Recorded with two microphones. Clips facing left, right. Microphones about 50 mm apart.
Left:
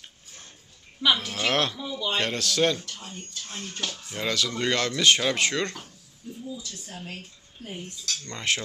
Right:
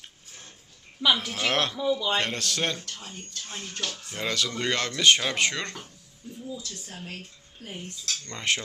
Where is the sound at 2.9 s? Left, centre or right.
Centre.